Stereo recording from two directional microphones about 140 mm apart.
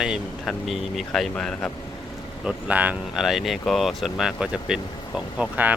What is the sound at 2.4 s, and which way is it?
Speech, 10° right (ahead or behind).